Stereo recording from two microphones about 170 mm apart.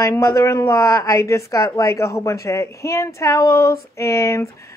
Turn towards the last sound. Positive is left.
turn(degrees=15)  # may be behind; listen again after turning